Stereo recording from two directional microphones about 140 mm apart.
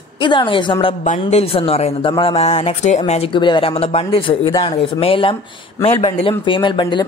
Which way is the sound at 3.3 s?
35° left (ahead or behind).